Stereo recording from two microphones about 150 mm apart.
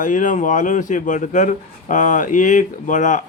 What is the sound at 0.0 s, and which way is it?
Speech, 60° left (ahead or behind).